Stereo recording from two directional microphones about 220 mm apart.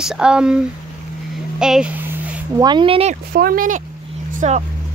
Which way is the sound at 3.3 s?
40° right (ahead or behind).